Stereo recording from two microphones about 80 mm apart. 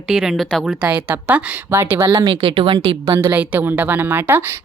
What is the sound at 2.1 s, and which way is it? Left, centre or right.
A woman's voice, right.